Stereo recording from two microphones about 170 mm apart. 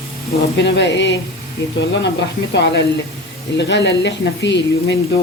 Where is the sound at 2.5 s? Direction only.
90° left.